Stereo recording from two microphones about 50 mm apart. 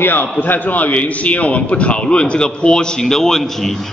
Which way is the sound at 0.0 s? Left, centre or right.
Left.